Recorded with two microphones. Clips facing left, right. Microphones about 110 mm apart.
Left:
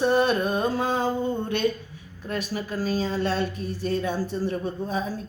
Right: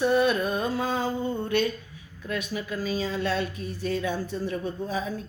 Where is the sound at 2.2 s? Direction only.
35° left (ahead or behind).